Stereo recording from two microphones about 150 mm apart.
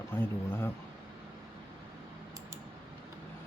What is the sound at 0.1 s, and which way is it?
Speech, 15° left (ahead or behind).